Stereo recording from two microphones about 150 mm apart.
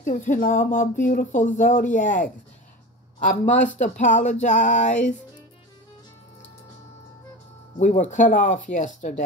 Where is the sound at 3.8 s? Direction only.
55° left (ahead or behind).